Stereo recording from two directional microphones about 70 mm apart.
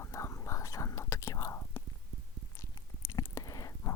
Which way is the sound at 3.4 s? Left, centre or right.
Left.